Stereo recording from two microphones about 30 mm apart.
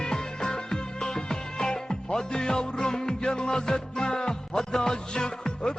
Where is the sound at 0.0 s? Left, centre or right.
Left.